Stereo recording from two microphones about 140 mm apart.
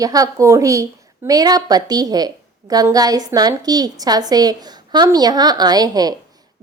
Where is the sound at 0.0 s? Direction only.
25° right (ahead or behind).